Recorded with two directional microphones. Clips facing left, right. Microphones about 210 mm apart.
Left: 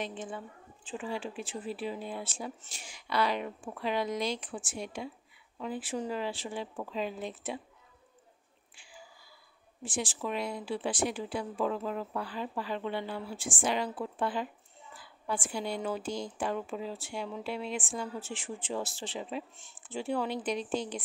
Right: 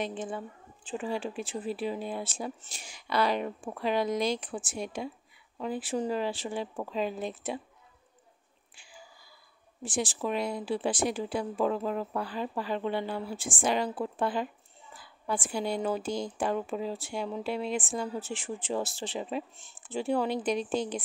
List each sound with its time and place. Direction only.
0.0 s a woman's voice: 40° right (ahead or behind)
9.8 s a woman's voice: 40° right (ahead or behind)